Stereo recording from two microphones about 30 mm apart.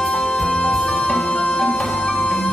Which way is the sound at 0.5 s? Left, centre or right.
Left.